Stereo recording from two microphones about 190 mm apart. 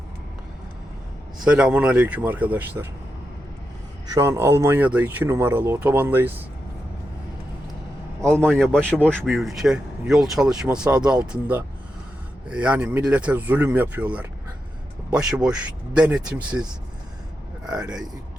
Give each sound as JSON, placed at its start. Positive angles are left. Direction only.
{"t": 1.5, "sound": "speech", "side_deg": -5}
{"t": 4.1, "sound": "speech", "side_deg": -15}
{"t": 9.0, "sound": "speech", "side_deg": 0}
{"t": 17.7, "sound": "speech", "side_deg": -5}